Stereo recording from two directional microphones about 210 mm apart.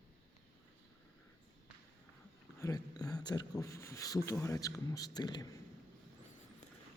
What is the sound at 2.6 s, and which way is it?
Speech, 15° left (ahead or behind).